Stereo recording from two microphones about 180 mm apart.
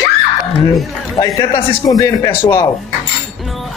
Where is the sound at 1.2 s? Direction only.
25° left (ahead or behind).